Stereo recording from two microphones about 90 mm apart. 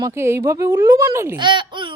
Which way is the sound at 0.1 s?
30° right (ahead or behind).